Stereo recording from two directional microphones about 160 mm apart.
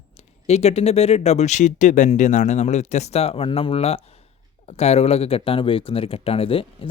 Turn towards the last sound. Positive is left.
turn(degrees=35)  # may be behind; listen again after turning